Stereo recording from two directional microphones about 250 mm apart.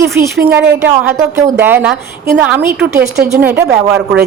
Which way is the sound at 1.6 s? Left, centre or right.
Centre.